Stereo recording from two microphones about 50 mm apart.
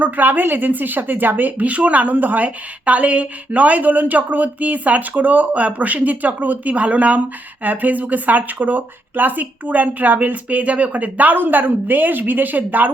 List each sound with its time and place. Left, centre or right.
0.0 s a woman's voice: right